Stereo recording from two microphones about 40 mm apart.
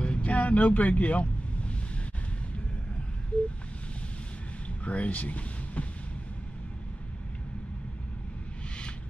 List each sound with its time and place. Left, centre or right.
0.0 s vehicle: left
4.8 s speech: left